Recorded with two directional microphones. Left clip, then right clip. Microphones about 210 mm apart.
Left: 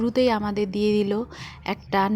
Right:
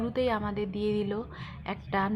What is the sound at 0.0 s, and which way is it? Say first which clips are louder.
A woman's voice: left 7 dB; 35° left (ahead or behind).